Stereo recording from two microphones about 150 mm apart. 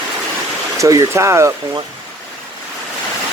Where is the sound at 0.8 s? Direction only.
20° right (ahead or behind).